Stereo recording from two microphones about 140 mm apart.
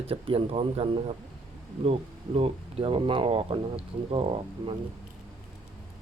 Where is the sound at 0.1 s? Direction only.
45° right (ahead or behind).